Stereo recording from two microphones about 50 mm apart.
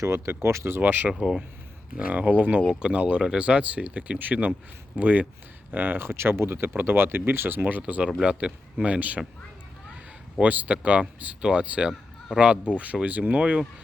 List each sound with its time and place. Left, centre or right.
0.0 s speech: right
0.8 s speech: right
1.1 s speech: centre
2.0 s speech: right
7.8 s speech: right
10.4 s speech: right